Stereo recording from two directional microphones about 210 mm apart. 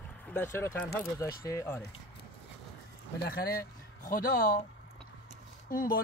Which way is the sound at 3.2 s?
45° left (ahead or behind).